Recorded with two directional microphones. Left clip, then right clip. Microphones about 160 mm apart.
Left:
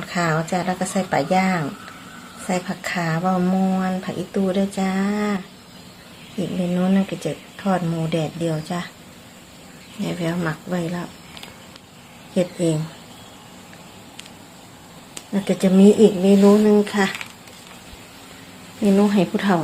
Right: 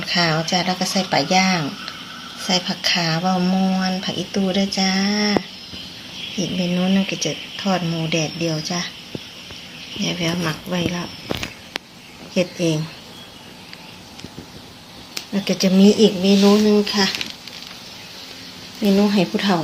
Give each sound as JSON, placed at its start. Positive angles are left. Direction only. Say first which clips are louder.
{"t": 0.1, "sound": "speech", "louder": "right 3 dB", "side_deg": -5}
{"t": 6.4, "sound": "speech", "louder": "even", "side_deg": 0}
{"t": 10.0, "sound": "speech", "louder": "right 2 dB", "side_deg": 0}
{"t": 12.3, "sound": "speech", "louder": "right 1 dB", "side_deg": 5}
{"t": 15.3, "sound": "speech", "louder": "even", "side_deg": 0}
{"t": 18.8, "sound": "speech", "louder": "even", "side_deg": -5}